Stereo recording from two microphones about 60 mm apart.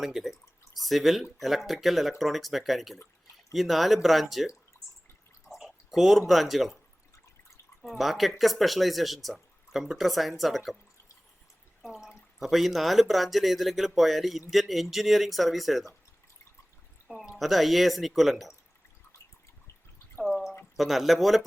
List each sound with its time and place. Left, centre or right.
0.0 s speech: centre
0.4 s drip: left
0.8 s speech: centre
5.5 s speech: centre
7.9 s speech: centre
11.8 s speech: centre
17.3 s speech: centre
20.2 s drip: centre
20.7 s speech: centre